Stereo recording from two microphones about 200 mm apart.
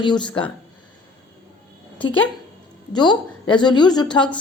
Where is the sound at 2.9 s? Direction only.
20° left (ahead or behind).